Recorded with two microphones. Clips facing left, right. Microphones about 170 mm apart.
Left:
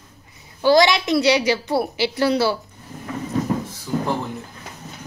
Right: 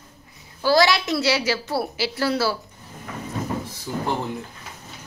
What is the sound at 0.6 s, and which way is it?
A woman's voice, 20° left (ahead or behind).